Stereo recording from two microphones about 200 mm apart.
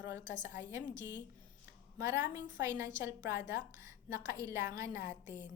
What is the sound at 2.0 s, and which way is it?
A woman's voice, 15° right (ahead or behind).